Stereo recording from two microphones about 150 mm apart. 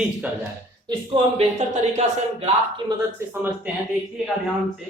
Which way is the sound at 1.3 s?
45° right (ahead or behind).